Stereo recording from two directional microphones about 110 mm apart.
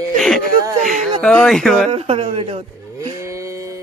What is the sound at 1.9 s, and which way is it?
Speech, 65° right (ahead or behind).